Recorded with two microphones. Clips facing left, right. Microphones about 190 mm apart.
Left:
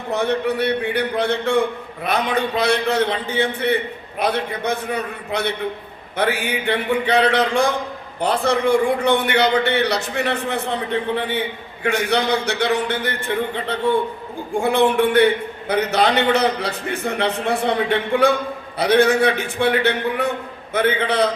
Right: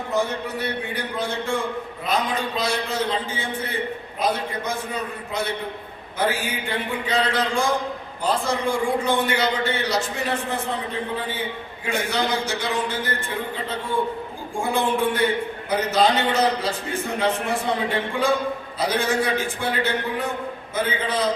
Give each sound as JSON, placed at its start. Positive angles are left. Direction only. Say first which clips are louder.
{"t": 0.1, "sound": "a man's voice", "louder": "left 6 dB", "side_deg": 65}
{"t": 11.8, "sound": "a man's voice", "louder": "left 5 dB", "side_deg": 65}